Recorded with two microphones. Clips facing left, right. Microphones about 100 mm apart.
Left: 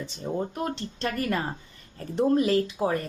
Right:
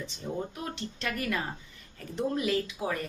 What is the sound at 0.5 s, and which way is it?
A woman's voice, 40° left (ahead or behind).